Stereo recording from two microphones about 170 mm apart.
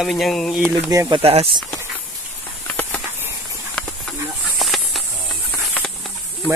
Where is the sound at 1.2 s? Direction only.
35° right (ahead or behind).